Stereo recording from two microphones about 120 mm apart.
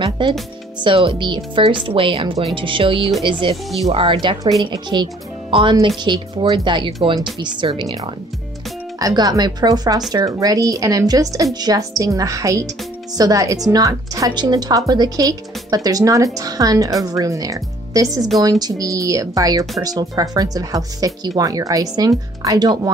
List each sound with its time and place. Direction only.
0.2 s speech: 40° right (ahead or behind)
9.0 s speech: 30° right (ahead or behind)